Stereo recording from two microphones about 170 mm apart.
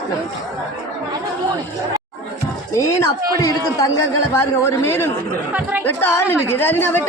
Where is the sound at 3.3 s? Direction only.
20° left (ahead or behind).